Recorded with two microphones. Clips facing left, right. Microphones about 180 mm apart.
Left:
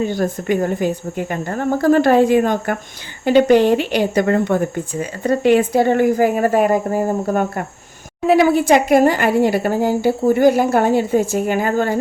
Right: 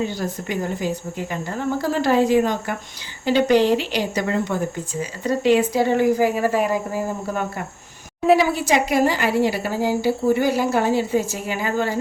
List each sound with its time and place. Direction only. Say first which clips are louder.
0.0 s a woman's voice: left 6 dB; 50° left (ahead or behind)